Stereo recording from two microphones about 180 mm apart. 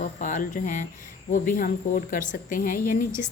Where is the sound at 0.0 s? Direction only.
45° left (ahead or behind).